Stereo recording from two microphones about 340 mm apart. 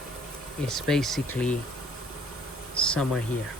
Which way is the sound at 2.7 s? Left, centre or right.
Centre.